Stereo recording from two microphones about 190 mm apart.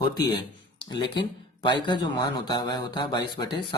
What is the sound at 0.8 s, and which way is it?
Speech, 25° left (ahead or behind).